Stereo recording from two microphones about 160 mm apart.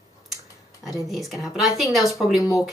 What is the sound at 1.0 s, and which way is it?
A woman's voice, centre (ahead or behind).